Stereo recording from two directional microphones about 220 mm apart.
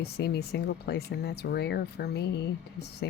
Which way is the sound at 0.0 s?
45° left (ahead or behind).